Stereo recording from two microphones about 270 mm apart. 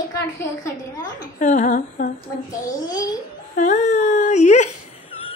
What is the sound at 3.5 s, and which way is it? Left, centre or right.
A woman's voice, left.